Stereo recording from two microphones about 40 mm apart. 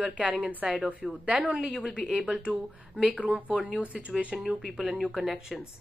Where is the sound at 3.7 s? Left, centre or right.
Right.